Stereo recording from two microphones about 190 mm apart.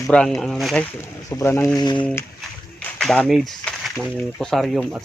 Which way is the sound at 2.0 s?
10° left (ahead or behind).